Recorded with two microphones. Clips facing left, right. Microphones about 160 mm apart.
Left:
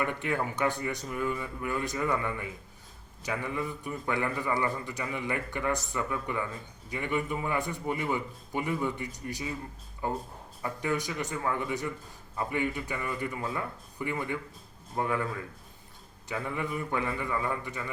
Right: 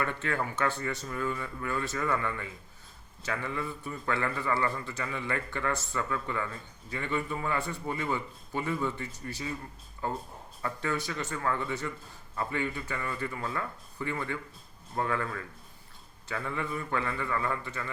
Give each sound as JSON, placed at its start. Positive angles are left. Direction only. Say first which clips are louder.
{"t": 0.0, "sound": "a man's voice", "louder": "left 1 dB", "side_deg": 15}